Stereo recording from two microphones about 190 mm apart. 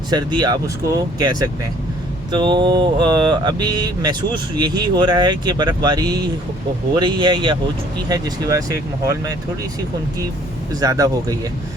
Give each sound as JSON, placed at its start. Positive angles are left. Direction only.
{"t": 0.1, "sound": "speech", "side_deg": -20}
{"t": 10.8, "sound": "speech", "side_deg": -20}